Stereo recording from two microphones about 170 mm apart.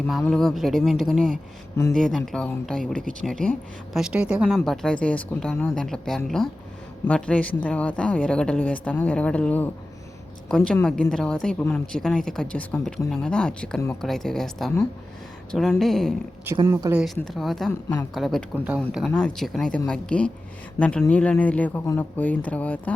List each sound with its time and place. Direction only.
0.1 s a woman's voice: centre (ahead or behind)
15.8 s speech: centre (ahead or behind)
16.6 s speech: 20° right (ahead or behind)
17.2 s a woman's voice: centre (ahead or behind)